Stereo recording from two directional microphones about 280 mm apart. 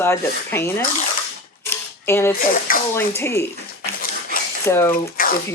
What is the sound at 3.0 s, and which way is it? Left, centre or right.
Speech, centre.